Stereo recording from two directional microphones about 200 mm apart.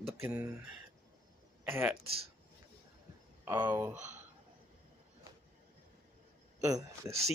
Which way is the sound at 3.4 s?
20° right (ahead or behind).